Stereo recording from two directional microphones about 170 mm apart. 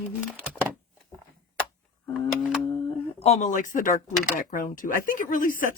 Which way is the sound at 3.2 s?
40° left (ahead or behind).